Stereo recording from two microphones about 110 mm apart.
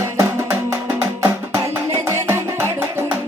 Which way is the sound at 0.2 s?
20° right (ahead or behind).